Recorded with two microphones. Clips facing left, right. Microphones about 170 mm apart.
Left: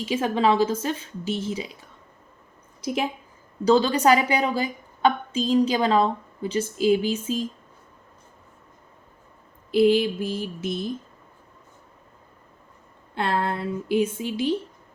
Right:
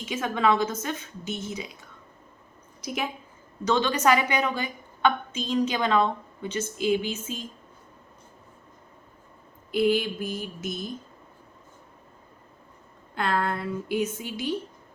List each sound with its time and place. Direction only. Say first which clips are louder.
0.0 s a woman's voice: left 3 dB; 30° left (ahead or behind)
2.8 s a woman's voice: left 5 dB; 30° left (ahead or behind)
9.7 s speech: left 5 dB; 30° left (ahead or behind)
13.1 s speech: left 2 dB; 30° left (ahead or behind)